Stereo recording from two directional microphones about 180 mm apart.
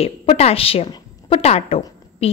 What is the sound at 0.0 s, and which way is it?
A woman's voice, 35° left (ahead or behind).